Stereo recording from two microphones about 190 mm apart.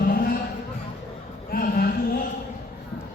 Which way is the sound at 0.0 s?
50° left (ahead or behind).